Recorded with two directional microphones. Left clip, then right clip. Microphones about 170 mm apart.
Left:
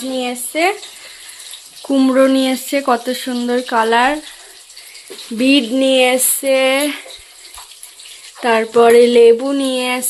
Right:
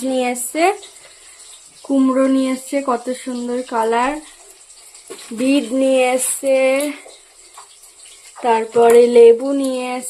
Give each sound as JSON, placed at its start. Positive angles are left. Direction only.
{"t": 0.1, "sound": "speech", "side_deg": -35}
{"t": 0.5, "sound": "speech", "side_deg": -20}
{"t": 1.9, "sound": "speech", "side_deg": 10}
{"t": 5.4, "sound": "speech", "side_deg": 0}
{"t": 8.4, "sound": "speech", "side_deg": 5}